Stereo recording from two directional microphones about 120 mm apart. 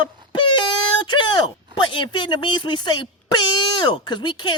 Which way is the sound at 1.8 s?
45° left (ahead or behind).